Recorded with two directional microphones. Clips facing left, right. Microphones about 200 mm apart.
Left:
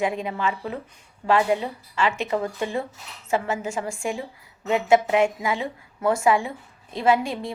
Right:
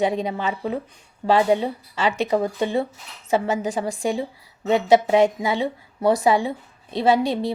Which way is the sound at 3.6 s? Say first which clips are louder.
Right 4 dB; 35° right (ahead or behind).